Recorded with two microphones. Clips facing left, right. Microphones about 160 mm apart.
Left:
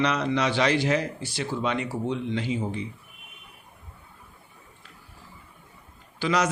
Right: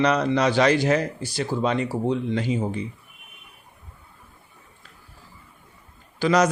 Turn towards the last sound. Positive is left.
turn(degrees=-45)  # may be behind; listen again after turning